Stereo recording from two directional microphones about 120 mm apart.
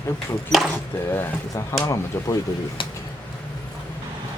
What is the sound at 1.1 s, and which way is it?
Speech, 25° left (ahead or behind).